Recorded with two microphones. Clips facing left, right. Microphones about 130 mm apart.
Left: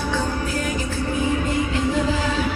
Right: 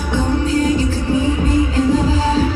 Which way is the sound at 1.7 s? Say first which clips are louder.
Right 6 dB; 35° right (ahead or behind).